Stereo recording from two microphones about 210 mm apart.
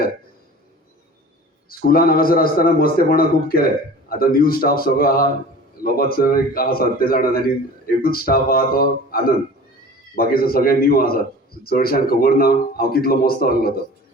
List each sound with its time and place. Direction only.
1.9 s speech: 45° left (ahead or behind)